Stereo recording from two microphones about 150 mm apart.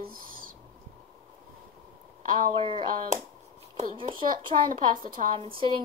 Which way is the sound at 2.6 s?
35° right (ahead or behind).